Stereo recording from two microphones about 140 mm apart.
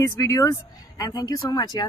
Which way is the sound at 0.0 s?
20° left (ahead or behind).